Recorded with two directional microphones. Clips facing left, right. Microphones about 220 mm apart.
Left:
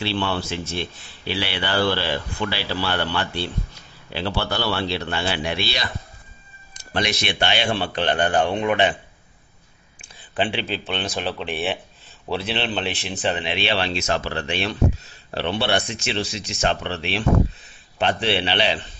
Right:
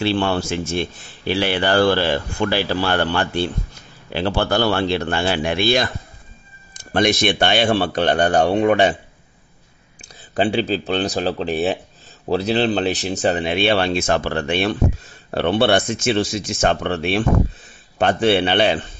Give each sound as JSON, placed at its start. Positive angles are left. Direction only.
{"t": 0.0, "sound": "speech", "side_deg": -45}
{"t": 10.3, "sound": "speech", "side_deg": -40}